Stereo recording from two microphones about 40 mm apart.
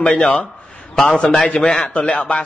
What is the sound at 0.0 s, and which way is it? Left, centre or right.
Speech, left.